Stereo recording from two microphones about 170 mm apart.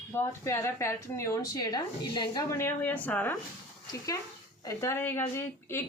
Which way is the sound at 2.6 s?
10° left (ahead or behind).